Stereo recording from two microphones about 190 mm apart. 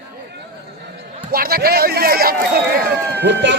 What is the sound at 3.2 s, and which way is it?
Speech, 65° right (ahead or behind).